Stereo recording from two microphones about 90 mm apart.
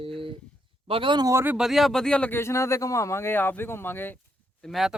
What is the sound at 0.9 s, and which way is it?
Speech, 75° right (ahead or behind).